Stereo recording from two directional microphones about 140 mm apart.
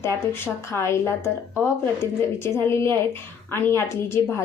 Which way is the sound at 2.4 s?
15° left (ahead or behind).